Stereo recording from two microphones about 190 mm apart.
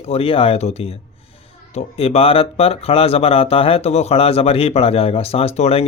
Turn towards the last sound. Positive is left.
turn(degrees=35)  # may be behind; listen again after turning